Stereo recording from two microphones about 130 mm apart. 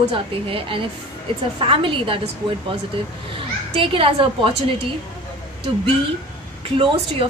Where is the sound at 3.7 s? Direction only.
45° right (ahead or behind).